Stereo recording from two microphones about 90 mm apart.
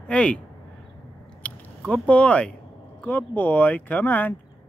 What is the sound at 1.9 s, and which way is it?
Speech, 15° left (ahead or behind).